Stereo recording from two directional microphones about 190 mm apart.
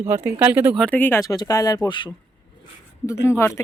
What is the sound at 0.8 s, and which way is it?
Speech, 10° left (ahead or behind).